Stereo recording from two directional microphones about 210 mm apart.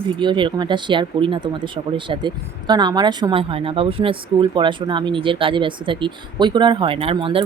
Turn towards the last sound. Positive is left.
turn(degrees=-25)  # may be behind; listen again after turning